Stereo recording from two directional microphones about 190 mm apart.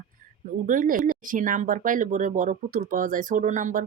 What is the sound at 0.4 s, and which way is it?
Speech, 45° right (ahead or behind).